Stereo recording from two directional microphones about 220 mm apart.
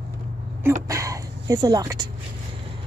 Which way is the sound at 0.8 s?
15° right (ahead or behind).